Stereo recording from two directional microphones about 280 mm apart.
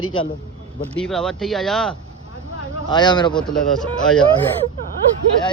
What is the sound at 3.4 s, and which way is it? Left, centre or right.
Speech, centre.